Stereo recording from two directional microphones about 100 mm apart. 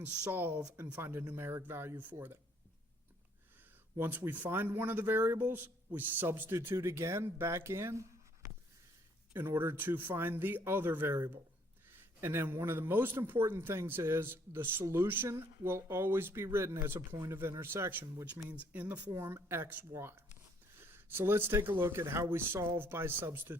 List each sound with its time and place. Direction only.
0.0 s speech: 20° right (ahead or behind)
3.9 s a man's voice: 20° right (ahead or behind)
18.4 s speech: 15° right (ahead or behind)